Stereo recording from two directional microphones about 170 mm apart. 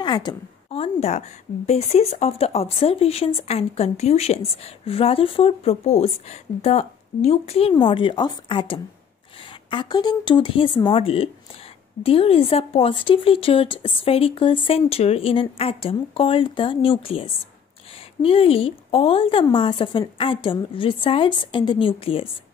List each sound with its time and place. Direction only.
0.0 s a woman's voice: 25° left (ahead or behind)
0.7 s a woman's voice: 40° left (ahead or behind)